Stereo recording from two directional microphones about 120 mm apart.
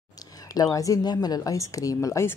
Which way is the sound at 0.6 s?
30° left (ahead or behind).